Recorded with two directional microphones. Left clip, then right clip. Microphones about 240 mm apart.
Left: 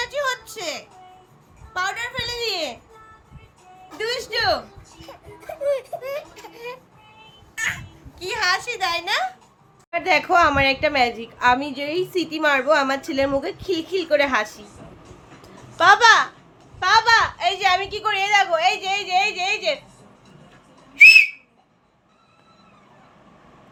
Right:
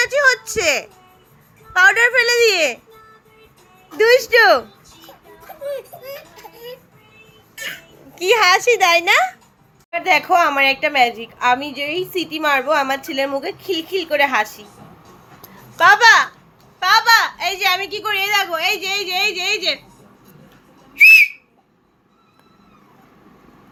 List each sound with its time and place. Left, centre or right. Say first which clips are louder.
0.0 s a sound: right 10 dB; centre
0.5 s a woman's voice: right 12 dB; centre
3.9 s a woman's voice: right 13 dB; centre
7.5 s music: left 4 dB; centre
8.1 s a child's voice: right 9 dB; centre
9.9 s a woman's voice: right 3 dB; centre
15.8 s a woman's voice: right 3 dB; centre
20.9 s whistle: right 1 dB; centre